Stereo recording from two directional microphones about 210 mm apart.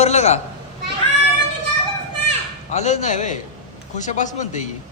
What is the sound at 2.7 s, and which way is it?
A man's voice, 35° left (ahead or behind).